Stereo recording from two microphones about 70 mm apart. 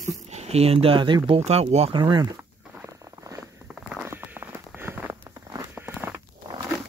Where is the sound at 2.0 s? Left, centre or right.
Right.